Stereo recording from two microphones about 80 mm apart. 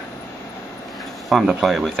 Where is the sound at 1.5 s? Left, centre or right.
Centre.